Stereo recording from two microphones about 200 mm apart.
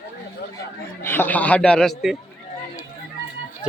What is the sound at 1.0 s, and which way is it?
A man's voice, 10° left (ahead or behind).